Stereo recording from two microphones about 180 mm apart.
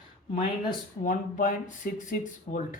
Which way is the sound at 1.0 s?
45° left (ahead or behind).